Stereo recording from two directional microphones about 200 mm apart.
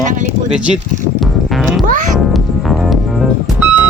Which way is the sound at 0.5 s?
5° right (ahead or behind).